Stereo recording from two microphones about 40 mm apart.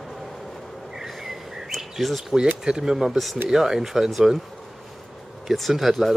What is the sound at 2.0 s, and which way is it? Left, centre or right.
Speech, centre.